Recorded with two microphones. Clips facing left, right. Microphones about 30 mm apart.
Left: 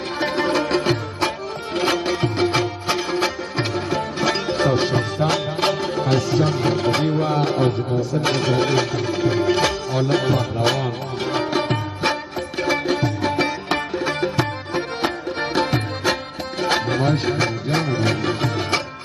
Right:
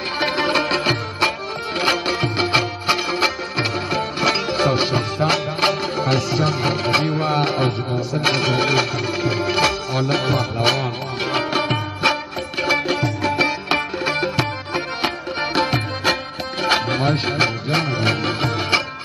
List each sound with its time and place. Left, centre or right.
0.2 s music: right
1.8 s music: right
9.3 s music: right